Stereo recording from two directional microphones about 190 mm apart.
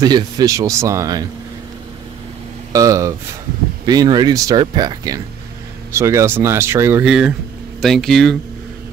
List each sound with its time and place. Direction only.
0.0 s speech: 20° right (ahead or behind)
2.7 s speech: 15° right (ahead or behind); by 8.4 s centre (ahead or behind)